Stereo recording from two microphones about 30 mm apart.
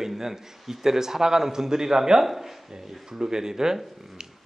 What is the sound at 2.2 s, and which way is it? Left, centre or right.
Speech, centre.